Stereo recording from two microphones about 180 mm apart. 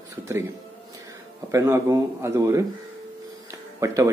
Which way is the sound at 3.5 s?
15° right (ahead or behind).